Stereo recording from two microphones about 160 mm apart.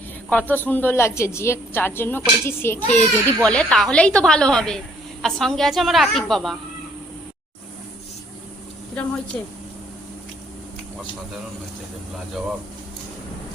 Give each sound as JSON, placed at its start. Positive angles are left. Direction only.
{"t": 0.3, "sound": "a woman's voice", "side_deg": 10}